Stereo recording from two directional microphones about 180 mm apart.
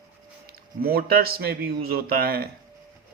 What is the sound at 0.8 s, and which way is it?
Speech, 55° right (ahead or behind).